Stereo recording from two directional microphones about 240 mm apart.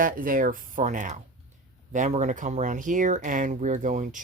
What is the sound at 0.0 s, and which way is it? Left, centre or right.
Speech, right.